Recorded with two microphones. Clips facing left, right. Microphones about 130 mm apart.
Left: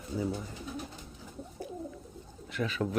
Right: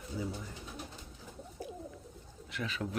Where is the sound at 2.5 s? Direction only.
50° left (ahead or behind).